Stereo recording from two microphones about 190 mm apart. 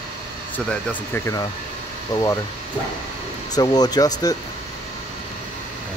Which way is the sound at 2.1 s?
20° left (ahead or behind).